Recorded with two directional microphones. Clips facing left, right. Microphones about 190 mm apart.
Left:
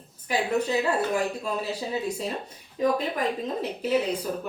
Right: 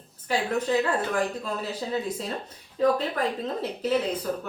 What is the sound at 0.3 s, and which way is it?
A woman's voice, 10° left (ahead or behind).